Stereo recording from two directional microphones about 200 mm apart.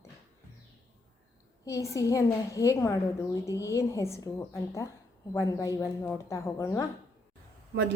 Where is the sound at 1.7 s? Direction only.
15° left (ahead or behind).